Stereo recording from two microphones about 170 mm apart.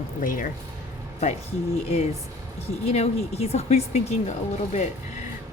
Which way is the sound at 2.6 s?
40° left (ahead or behind).